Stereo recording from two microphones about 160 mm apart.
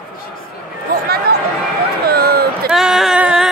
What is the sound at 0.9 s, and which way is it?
Speech, 65° right (ahead or behind).